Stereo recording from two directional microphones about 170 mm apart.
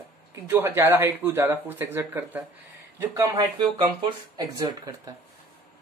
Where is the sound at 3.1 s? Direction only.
20° right (ahead or behind).